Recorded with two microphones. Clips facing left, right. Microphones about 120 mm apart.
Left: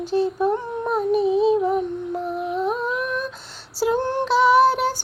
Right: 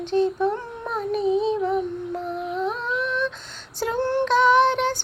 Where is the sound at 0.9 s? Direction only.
5° left (ahead or behind).